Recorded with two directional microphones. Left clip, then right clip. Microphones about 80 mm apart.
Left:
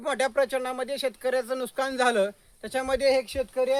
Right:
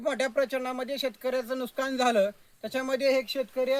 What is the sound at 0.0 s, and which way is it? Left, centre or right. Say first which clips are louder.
Speech: left 2 dB; left.